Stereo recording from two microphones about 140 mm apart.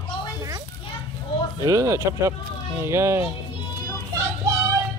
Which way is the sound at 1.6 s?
20° right (ahead or behind).